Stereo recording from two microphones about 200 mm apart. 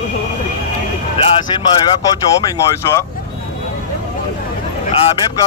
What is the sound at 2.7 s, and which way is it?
Speech, 15° left (ahead or behind).